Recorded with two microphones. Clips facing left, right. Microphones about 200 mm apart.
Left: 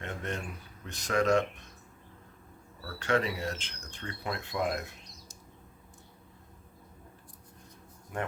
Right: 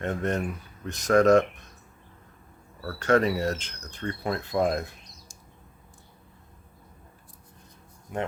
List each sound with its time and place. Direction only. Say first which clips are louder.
0.0 s speech: right 9 dB; 45° right (ahead or behind)
2.8 s speech: right 7 dB; 45° right (ahead or behind)
8.1 s speech: right 4 dB; 20° right (ahead or behind)